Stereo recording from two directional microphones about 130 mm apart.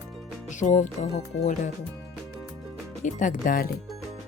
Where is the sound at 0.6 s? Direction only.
70° left (ahead or behind).